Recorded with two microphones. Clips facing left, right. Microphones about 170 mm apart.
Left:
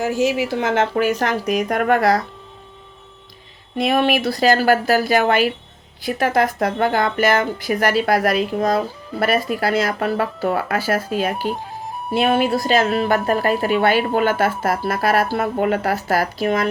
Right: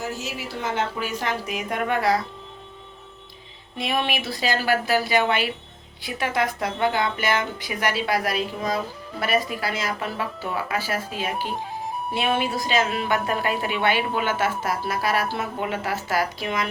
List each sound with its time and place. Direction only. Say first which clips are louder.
0.0 s a woman's voice: left 12 dB; 90° left
1.2 s speech: left 8 dB; 65° left (ahead or behind)
2.0 s speech: left 5 dB; 40° left (ahead or behind)
3.8 s a woman's voice: left 8 dB; 50° left (ahead or behind)
11.5 s music: even; centre (ahead or behind)
12.2 s a woman's voice: left 7 dB; 50° left (ahead or behind)